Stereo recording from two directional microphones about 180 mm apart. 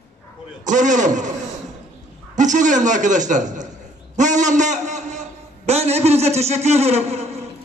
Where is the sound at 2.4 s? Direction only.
45° right (ahead or behind).